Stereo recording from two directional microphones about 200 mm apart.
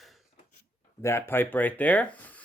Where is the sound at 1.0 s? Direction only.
15° left (ahead or behind).